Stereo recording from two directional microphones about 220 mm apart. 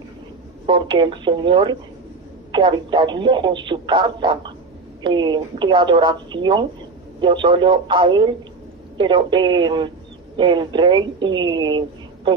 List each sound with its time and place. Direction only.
0.7 s speech: 20° right (ahead or behind)